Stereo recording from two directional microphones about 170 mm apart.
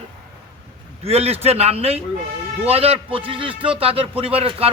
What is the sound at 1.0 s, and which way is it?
Speech, 35° right (ahead or behind).